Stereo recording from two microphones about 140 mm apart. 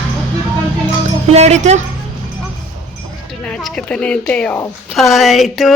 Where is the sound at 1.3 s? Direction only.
55° right (ahead or behind).